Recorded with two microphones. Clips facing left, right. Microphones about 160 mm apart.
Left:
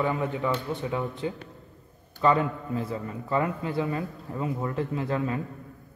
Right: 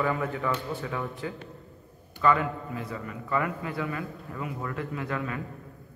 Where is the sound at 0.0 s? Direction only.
20° left (ahead or behind).